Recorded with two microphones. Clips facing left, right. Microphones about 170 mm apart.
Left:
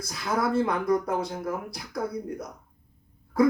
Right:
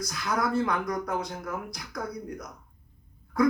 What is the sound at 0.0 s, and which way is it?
Speech, 30° left (ahead or behind).